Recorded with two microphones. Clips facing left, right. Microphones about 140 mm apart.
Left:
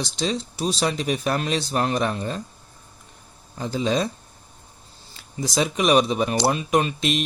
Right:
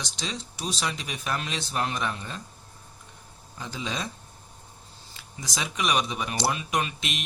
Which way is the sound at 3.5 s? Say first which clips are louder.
Left 11 dB; 35° left (ahead or behind).